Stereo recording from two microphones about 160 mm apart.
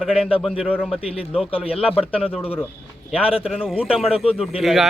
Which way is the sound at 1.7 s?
35° left (ahead or behind).